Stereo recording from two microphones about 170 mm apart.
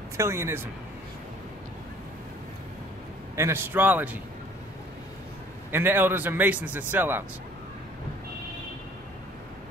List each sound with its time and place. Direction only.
0.2 s a man's voice: 15° right (ahead or behind)
3.3 s a man's voice: 15° right (ahead or behind)
5.7 s a man's voice: 15° right (ahead or behind)